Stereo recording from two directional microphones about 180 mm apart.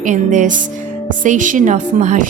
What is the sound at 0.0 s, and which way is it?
Speech, 45° right (ahead or behind).